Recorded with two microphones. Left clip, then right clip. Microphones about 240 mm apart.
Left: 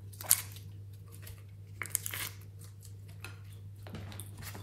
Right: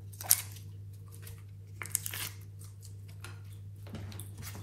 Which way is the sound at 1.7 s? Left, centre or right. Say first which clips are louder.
Left 1 dB; centre.